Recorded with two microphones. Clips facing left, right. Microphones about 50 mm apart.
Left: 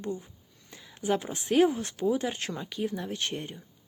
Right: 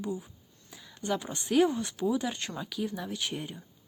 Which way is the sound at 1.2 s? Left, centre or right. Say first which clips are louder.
Left 1 dB; centre.